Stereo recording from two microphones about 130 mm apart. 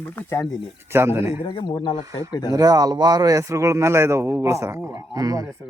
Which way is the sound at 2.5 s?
30° right (ahead or behind).